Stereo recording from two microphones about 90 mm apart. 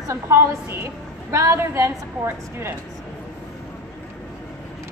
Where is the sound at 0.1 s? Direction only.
30° right (ahead or behind).